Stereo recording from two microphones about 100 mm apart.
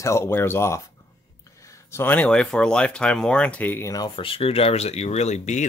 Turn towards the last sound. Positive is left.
turn(degrees=90)